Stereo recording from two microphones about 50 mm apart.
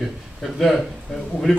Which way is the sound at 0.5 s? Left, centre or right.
Centre.